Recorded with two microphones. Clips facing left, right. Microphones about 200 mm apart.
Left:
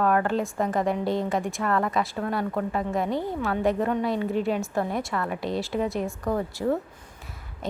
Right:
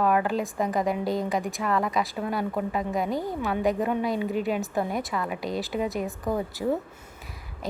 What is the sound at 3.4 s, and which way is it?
A woman's voice, 15° right (ahead or behind).